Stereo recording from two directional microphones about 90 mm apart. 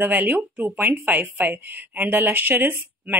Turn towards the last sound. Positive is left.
turn(degrees=-20)  # may be behind; listen again after turning